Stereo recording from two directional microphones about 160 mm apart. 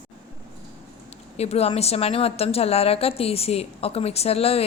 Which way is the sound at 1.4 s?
40° left (ahead or behind).